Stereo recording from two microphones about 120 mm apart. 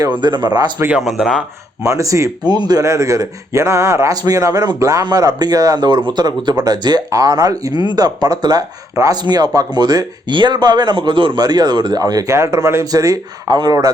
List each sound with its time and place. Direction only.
0.0 s speech: 40° right (ahead or behind)
0.8 s speech: 10° right (ahead or behind)
1.9 s speech: 25° right (ahead or behind)